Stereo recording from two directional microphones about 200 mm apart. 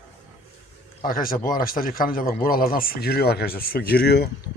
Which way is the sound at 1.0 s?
45° left (ahead or behind).